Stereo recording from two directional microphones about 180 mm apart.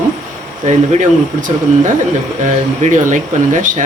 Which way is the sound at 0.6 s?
40° right (ahead or behind).